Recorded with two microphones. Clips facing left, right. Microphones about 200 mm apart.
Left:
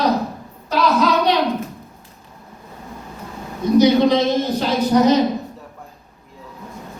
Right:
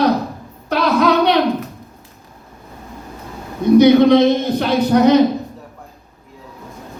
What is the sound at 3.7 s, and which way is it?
A woman's voice, 60° right (ahead or behind).